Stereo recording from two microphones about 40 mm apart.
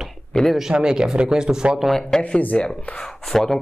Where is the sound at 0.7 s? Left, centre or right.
Centre.